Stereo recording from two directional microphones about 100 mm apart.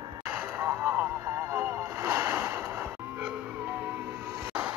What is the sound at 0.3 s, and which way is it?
Vehicle, 25° right (ahead or behind).